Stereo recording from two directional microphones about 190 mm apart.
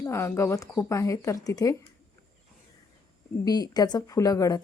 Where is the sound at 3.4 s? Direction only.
20° left (ahead or behind).